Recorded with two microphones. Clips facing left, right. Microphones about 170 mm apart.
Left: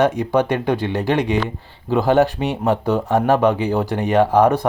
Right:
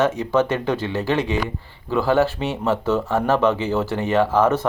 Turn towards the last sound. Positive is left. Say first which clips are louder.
# left 3 dB
turn(degrees=15)  # may be behind; listen again after turning